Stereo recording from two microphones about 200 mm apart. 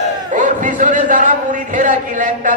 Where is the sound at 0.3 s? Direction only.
40° right (ahead or behind).